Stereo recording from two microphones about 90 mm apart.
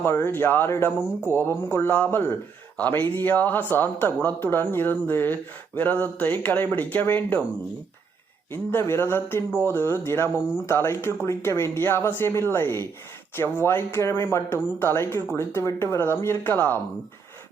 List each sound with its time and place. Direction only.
0.0 s speech: 25° left (ahead or behind)
8.7 s speech: 25° left (ahead or behind)